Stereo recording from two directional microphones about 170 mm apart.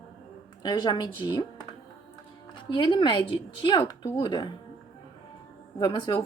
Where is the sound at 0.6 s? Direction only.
25° left (ahead or behind).